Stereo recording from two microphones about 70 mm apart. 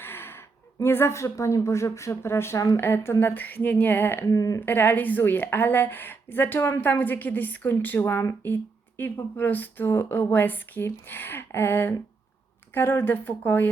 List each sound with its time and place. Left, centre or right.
0.0 s speech: left
4.3 s speech: left
4.6 s a woman's voice: left